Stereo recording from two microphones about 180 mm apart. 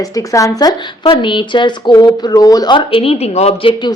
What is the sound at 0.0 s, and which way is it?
Speech, 20° left (ahead or behind).